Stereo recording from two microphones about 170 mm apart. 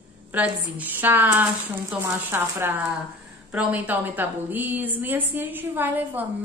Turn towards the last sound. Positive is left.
turn(degrees=-10)  # may be behind; listen again after turning